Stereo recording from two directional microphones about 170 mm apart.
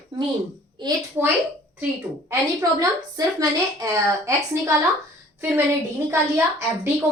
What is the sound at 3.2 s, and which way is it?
A woman's voice, 20° right (ahead or behind).